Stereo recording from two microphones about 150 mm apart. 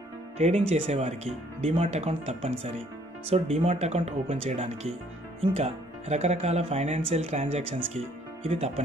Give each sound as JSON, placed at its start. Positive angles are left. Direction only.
{"t": 0.4, "sound": "speech", "side_deg": -45}